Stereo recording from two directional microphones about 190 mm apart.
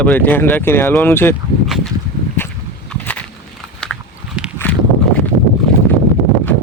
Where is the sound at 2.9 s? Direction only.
10° left (ahead or behind).